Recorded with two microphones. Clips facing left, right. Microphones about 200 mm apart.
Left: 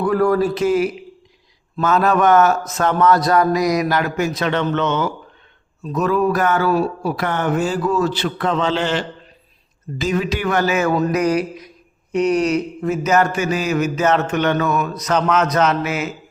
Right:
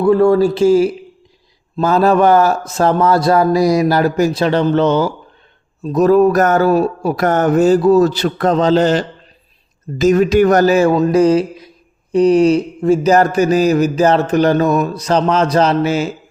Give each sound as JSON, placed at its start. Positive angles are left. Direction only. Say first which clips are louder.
{"t": 0.0, "sound": "speech", "louder": "right 6 dB", "side_deg": -25}